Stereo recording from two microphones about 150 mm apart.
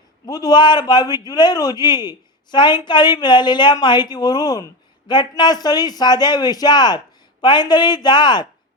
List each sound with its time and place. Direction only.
0.3 s a woman's voice: 25° left (ahead or behind)